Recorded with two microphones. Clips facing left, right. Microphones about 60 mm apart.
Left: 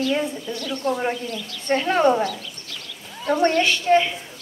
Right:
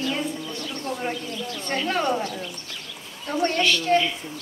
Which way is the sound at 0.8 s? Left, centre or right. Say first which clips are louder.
Left 6 dB; left.